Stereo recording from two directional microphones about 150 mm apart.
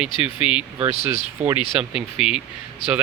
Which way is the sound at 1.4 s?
50° right (ahead or behind).